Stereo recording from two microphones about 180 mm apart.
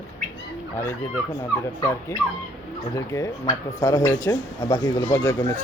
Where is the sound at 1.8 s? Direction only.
20° left (ahead or behind).